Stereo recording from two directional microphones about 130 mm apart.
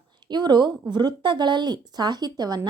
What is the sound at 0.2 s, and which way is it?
A woman's voice, 35° right (ahead or behind).